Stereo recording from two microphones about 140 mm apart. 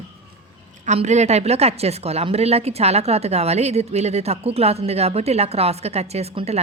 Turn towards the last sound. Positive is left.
turn(degrees=-50)  # may be behind; listen again after turning